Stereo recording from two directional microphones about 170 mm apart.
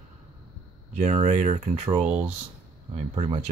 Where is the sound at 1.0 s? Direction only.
40° right (ahead or behind).